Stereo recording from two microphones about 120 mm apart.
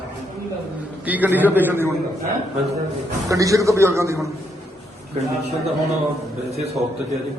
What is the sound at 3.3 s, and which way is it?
Speech, 25° right (ahead or behind).